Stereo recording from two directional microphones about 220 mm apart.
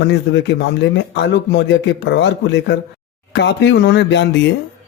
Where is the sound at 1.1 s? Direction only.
50° left (ahead or behind).